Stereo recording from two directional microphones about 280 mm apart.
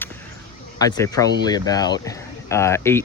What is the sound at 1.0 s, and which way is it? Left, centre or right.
Speech, centre.